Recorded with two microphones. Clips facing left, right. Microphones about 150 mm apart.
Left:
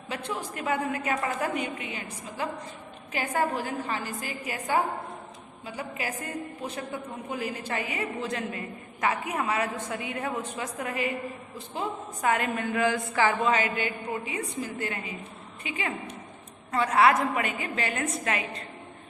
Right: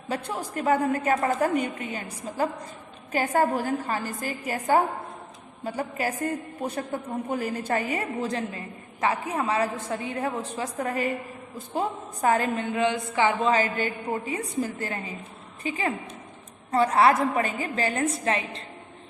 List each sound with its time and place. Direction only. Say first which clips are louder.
0.1 s a woman's voice: right 3 dB; 40° right (ahead or behind); by 13.5 s 25° right (ahead or behind)
13.5 s a woman's voice: right 3 dB; 35° right (ahead or behind)